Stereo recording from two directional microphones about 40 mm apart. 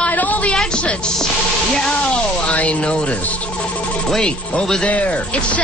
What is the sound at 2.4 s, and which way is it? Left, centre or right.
Speech, left.